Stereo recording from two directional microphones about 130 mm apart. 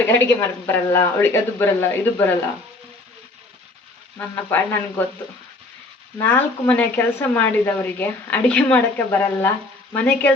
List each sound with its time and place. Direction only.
0.1 s speech: 20° left (ahead or behind)
4.2 s speech: 15° left (ahead or behind)
6.1 s speech: 15° left (ahead or behind)